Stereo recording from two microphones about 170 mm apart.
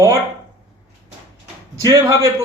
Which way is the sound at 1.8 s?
20° right (ahead or behind).